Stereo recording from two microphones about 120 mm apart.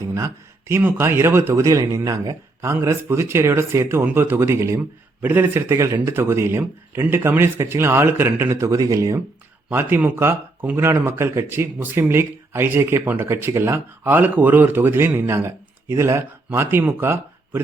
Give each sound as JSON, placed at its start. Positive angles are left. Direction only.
{"t": 0.0, "sound": "a sound", "side_deg": -25}
{"t": 0.7, "sound": "speech", "side_deg": -20}
{"t": 9.6, "sound": "speech", "side_deg": -15}